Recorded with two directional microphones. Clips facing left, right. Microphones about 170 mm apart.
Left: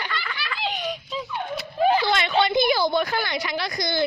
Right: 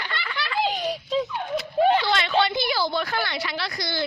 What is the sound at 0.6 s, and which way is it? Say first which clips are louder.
Giggle: right 4 dB; 35° right (ahead or behind).